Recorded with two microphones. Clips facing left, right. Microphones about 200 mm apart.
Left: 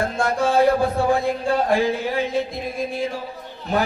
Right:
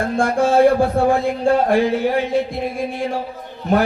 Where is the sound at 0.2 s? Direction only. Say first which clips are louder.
Right 5 dB; 50° right (ahead or behind).